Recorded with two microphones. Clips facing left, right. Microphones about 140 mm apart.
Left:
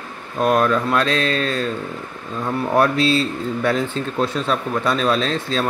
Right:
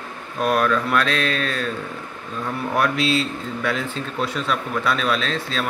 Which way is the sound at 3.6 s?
35° left (ahead or behind).